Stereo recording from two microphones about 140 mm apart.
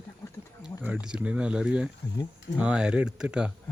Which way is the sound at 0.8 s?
10° right (ahead or behind).